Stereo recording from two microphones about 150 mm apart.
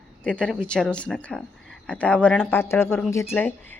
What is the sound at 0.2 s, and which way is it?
A woman's voice, 5° left (ahead or behind).